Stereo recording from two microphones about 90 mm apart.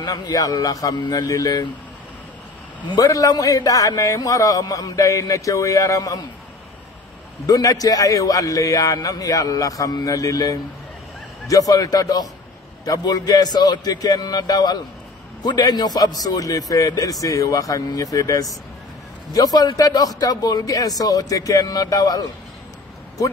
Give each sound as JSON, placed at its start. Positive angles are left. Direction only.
{"t": 0.0, "sound": "speech", "side_deg": 45}
{"t": 2.9, "sound": "a man's voice", "side_deg": 40}
{"t": 7.4, "sound": "a man's voice", "side_deg": 40}